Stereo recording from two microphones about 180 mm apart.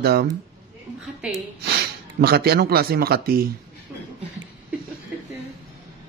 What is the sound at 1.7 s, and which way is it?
Speech, 60° right (ahead or behind).